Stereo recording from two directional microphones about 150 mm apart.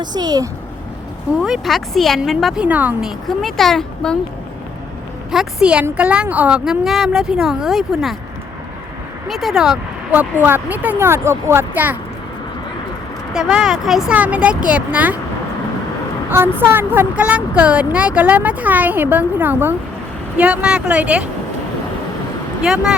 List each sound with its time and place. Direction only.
0.0 s speech: 30° right (ahead or behind)
1.4 s a woman's voice: 5° right (ahead or behind)
3.2 s a woman's voice: centre (ahead or behind)
5.3 s a woman's voice: 5° right (ahead or behind)
9.2 s speech: centre (ahead or behind)
13.3 s a woman's voice: 5° right (ahead or behind)
16.3 s speech: 15° right (ahead or behind)
22.6 s a woman's voice: 5° right (ahead or behind)